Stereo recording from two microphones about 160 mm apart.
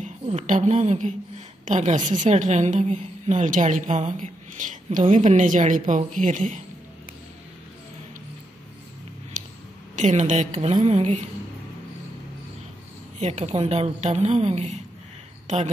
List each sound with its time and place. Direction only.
0.0 s a woman's voice: 50° right (ahead or behind)
9.9 s a woman's voice: 50° right (ahead or behind)
13.2 s a woman's voice: 40° right (ahead or behind)